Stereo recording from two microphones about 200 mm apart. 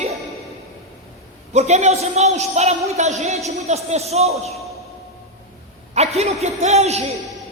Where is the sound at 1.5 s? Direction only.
35° right (ahead or behind).